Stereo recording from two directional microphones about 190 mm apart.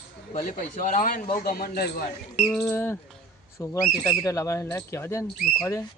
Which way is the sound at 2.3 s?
Centre (ahead or behind).